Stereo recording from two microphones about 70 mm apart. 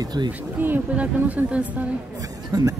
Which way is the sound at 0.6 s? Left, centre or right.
Right.